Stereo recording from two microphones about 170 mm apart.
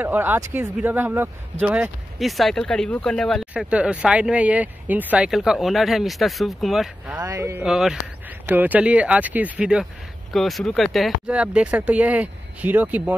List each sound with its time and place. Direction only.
0.0 s speech: 10° right (ahead or behind)
7.2 s speech: 20° right (ahead or behind)
7.6 s speech: 5° right (ahead or behind)